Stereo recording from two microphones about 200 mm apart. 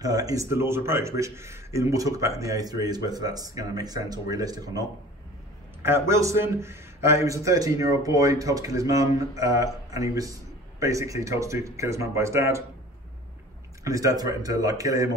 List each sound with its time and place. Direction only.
0.0 s a man's voice: 20° right (ahead or behind)
5.9 s a man's voice: 15° right (ahead or behind)
13.8 s a man's voice: 15° right (ahead or behind)